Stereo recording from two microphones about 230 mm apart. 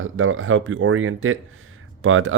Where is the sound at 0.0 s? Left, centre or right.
Right.